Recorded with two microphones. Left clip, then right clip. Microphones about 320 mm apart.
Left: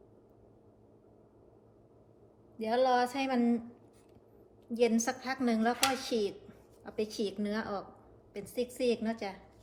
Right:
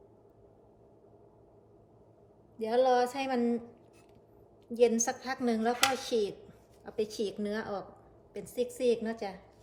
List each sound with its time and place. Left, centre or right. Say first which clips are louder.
2.6 s speech: right 2 dB; centre
4.7 s speech: right 3 dB; centre